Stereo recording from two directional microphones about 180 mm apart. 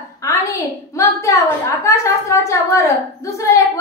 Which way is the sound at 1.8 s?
15° left (ahead or behind).